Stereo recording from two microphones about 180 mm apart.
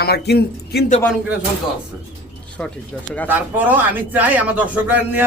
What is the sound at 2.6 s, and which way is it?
Speech, 5° left (ahead or behind).